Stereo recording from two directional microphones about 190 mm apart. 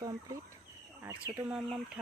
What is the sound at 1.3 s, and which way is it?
Speech, 10° right (ahead or behind).